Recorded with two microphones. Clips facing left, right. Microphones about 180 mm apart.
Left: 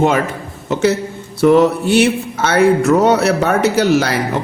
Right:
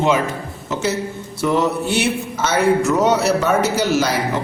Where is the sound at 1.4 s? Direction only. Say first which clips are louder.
Left 7 dB; 60° left (ahead or behind).